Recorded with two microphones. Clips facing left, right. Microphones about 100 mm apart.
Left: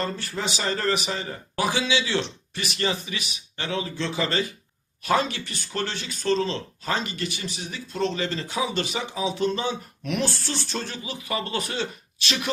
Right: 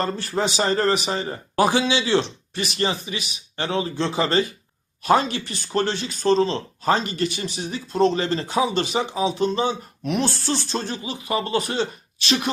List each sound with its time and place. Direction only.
0.0 s speech: 35° right (ahead or behind)
3.6 s speech: 35° right (ahead or behind)